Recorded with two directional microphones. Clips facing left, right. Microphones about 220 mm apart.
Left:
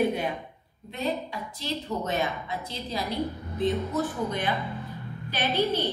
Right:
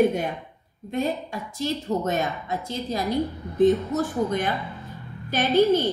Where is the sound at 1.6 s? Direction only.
45° right (ahead or behind).